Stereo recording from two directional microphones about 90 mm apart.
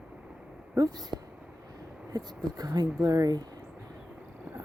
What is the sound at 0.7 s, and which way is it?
Speech, 45° right (ahead or behind).